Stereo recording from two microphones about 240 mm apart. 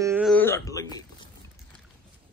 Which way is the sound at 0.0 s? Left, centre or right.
Centre.